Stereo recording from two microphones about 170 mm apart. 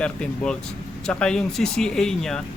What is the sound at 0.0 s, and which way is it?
Speech, 5° left (ahead or behind).